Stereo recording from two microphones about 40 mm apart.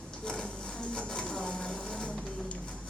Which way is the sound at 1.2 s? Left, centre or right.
Left.